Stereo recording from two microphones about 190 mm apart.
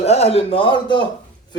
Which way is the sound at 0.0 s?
30° left (ahead or behind).